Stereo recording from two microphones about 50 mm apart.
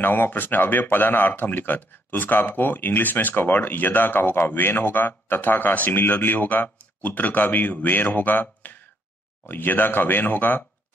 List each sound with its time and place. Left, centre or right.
0.0 s speech: left